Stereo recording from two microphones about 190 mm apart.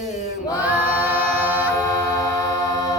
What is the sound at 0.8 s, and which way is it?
A capella, 10° right (ahead or behind).